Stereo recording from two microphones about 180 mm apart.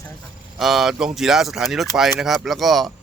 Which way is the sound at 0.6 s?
Centre (ahead or behind).